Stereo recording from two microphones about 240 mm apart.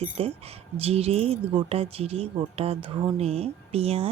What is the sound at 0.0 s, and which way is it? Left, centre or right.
Speech, right.